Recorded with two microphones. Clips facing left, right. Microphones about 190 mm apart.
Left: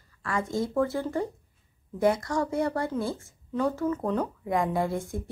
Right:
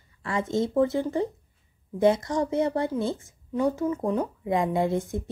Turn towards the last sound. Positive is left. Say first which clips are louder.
# right 3 dB
turn(degrees=-20)  # may be behind; listen again after turning